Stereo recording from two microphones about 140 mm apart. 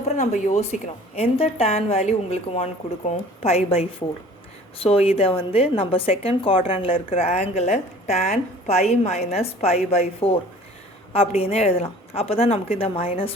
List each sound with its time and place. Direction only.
0.2 s a woman's voice: 55° left (ahead or behind)